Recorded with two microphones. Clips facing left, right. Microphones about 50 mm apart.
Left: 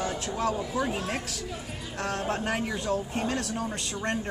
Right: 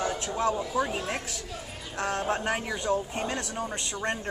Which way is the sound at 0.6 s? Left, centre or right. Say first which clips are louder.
Right 1 dB; centre.